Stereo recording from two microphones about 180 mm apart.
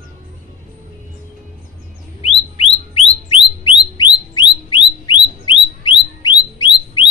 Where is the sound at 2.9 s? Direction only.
30° left (ahead or behind).